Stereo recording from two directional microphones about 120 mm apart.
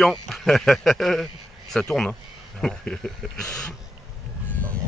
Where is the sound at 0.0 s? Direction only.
5° left (ahead or behind).